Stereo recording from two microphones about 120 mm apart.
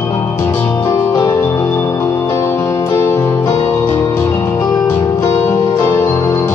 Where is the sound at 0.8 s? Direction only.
30° left (ahead or behind).